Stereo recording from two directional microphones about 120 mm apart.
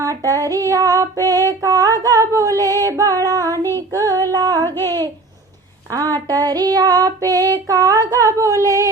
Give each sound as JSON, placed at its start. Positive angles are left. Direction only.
{"t": 0.0, "sound": "female singing", "side_deg": -25}
{"t": 4.6, "sound": "child singing", "side_deg": 20}
{"t": 6.1, "sound": "child singing", "side_deg": -30}
{"t": 8.6, "sound": "a sound", "side_deg": -25}